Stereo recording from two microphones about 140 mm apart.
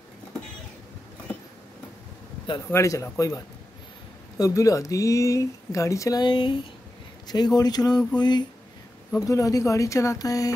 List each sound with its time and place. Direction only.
2.7 s speech: 20° left (ahead or behind)